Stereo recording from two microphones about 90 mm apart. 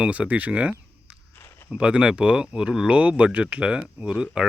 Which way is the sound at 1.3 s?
25° left (ahead or behind).